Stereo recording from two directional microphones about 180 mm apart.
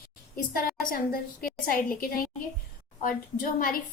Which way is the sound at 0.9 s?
55° left (ahead or behind).